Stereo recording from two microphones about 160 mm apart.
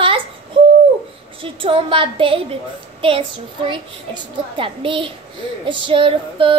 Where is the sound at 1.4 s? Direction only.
35° right (ahead or behind).